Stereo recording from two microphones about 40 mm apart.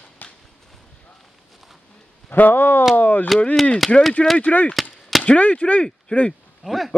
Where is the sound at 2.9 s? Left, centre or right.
Left.